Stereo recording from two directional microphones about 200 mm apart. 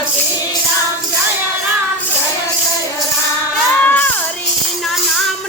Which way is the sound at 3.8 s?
10° left (ahead or behind).